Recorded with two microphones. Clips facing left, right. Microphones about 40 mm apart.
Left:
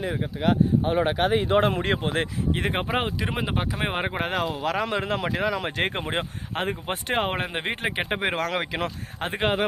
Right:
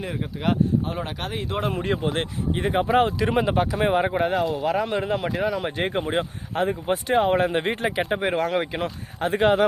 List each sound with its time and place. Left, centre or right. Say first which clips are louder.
0.0 s speech: left 1 dB; centre
0.9 s speech: left 8 dB; left
1.7 s speech: even; left
2.8 s speech: right 6 dB; centre
3.8 s speech: right 7 dB; left
4.2 s speech: right 4 dB; left
7.3 s speech: right 6 dB; left
8.2 s speech: right 2 dB; left
9.3 s speech: right 6 dB; centre